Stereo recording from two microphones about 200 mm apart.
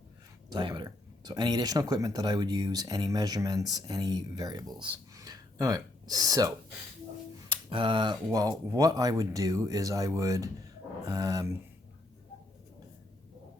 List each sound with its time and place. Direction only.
0.5 s speech: 20° right (ahead or behind)
7.5 s speech: 25° right (ahead or behind)